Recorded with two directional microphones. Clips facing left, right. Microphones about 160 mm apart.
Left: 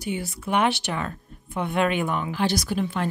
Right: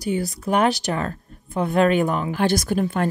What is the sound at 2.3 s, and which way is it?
Speech, 50° right (ahead or behind).